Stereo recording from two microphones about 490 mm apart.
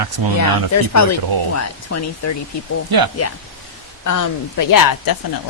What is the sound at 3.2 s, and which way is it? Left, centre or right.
Speech, left.